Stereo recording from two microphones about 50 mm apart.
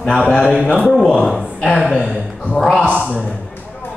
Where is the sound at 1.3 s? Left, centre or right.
Centre.